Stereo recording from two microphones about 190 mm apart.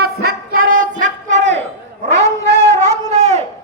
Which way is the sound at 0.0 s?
50° right (ahead or behind).